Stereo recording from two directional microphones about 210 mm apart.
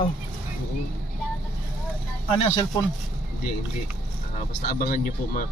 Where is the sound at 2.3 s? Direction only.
25° left (ahead or behind).